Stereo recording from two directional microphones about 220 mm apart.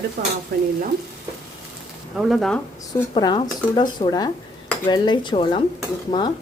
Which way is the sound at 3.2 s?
20° left (ahead or behind).